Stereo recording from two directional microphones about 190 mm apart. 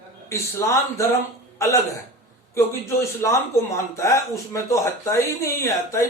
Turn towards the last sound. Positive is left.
turn(degrees=15)  # may be behind; listen again after turning